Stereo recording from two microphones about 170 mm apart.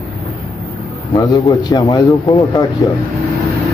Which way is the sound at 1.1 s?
20° left (ahead or behind).